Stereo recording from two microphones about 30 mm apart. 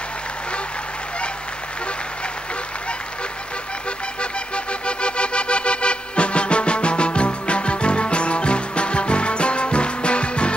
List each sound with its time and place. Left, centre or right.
4.8 s music: left